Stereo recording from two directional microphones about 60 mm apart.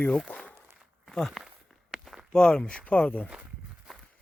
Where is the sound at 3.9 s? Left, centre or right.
Centre.